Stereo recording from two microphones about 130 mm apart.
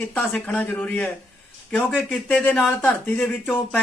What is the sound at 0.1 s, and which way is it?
Speech, 10° left (ahead or behind).